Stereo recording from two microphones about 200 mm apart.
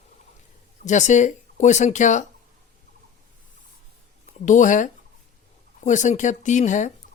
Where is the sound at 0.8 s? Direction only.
35° left (ahead or behind).